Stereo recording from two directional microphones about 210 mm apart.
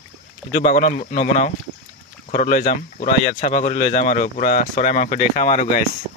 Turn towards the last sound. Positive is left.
turn(degrees=35)  # may be behind; listen again after turning